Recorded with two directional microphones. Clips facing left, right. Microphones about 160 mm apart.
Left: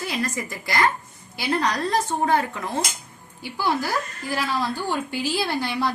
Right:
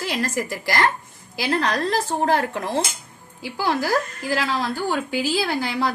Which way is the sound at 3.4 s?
90° right.